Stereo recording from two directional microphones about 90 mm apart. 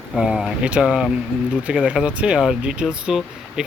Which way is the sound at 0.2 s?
5° right (ahead or behind).